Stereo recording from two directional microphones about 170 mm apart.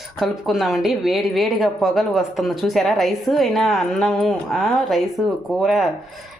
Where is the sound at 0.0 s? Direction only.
Centre (ahead or behind).